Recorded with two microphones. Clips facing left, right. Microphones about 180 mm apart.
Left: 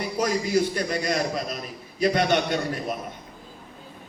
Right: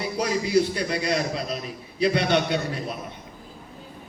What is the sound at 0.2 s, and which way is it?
A man's voice, 45° left (ahead or behind).